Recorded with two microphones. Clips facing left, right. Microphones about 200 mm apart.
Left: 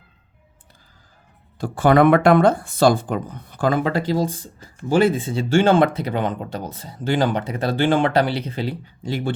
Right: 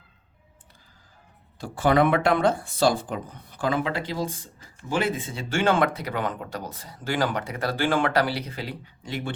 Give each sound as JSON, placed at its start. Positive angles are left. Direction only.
{"t": 1.5, "sound": "speech", "side_deg": 50}